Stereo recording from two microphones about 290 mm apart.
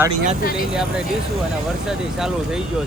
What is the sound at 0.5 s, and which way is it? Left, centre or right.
A man's voice, centre.